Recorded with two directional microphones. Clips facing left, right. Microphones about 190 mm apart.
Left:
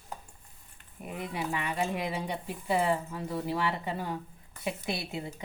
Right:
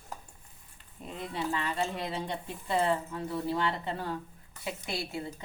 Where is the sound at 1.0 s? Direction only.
10° left (ahead or behind).